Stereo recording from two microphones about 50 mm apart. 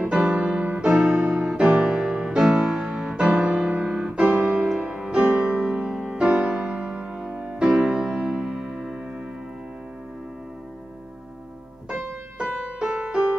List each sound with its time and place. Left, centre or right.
0.0 s piano: right
2.4 s music: centre
5.3 s music: right; by 9.0 s centre
11.9 s piano: centre